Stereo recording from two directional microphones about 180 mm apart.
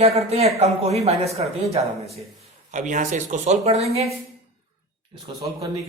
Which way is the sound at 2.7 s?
45° right (ahead or behind).